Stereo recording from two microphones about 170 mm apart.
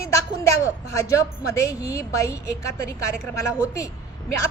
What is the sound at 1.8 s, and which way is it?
Speech, 20° left (ahead or behind).